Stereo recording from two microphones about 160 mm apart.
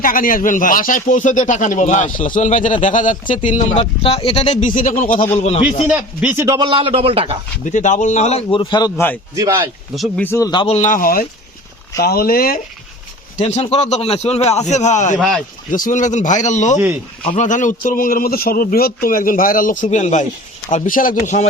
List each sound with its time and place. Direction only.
0.0 s a man's voice: 60° left (ahead or behind)
3.8 s speech: 35° left (ahead or behind)
4.4 s a man's voice: 50° left (ahead or behind)
5.3 s speech: 40° left (ahead or behind)
5.9 s speech: 10° right (ahead or behind)
6.6 s speech: 30° right (ahead or behind)
7.6 s a man's voice: 50° left (ahead or behind); by 8.9 s 30° left (ahead or behind)
9.3 s speech: 20° right (ahead or behind)
9.9 s speech: centre (ahead or behind)
10.2 s a man's voice: 20° left (ahead or behind)
10.8 s a man's voice: 55° left (ahead or behind)
13.4 s a man's voice: 40° left (ahead or behind)
15.2 s speech: centre (ahead or behind)
15.7 s a man's voice: 55° left (ahead or behind)